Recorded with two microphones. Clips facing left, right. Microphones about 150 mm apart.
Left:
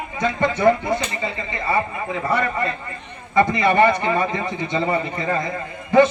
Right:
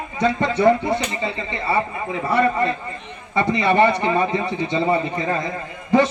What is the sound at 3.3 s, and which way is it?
A man's voice, 30° right (ahead or behind).